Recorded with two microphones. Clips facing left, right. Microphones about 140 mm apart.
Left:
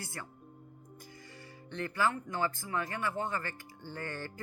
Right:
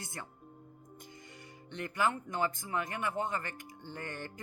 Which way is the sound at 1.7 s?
15° right (ahead or behind).